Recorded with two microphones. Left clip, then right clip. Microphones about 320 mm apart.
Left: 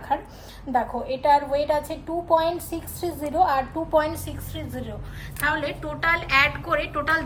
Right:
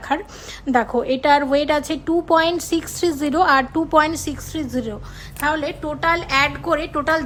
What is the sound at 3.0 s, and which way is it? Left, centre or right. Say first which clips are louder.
Speech: right 3 dB; right.